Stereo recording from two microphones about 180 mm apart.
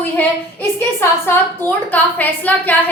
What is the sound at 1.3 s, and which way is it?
A woman's voice, 10° left (ahead or behind).